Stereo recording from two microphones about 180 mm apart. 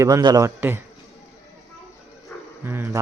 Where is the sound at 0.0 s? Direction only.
20° right (ahead or behind).